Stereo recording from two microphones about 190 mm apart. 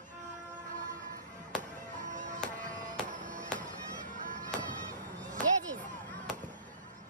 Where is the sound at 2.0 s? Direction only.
40° right (ahead or behind).